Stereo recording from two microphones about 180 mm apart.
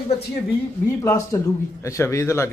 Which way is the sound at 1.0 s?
15° left (ahead or behind).